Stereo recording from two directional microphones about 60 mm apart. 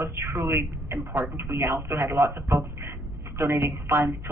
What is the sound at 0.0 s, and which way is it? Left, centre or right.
A woman's voice, right.